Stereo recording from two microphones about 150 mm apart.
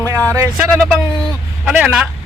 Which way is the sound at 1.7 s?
5° right (ahead or behind).